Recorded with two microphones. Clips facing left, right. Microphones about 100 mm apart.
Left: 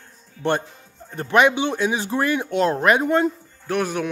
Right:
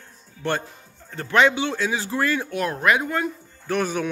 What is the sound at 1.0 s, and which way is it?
Speech, 20° left (ahead or behind).